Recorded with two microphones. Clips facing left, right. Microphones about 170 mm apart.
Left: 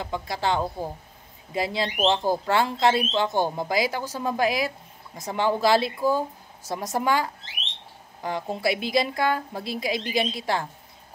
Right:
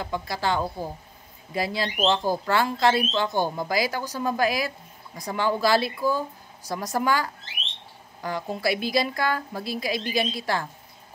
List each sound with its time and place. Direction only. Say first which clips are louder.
0.0 s speech: even; 20° left (ahead or behind)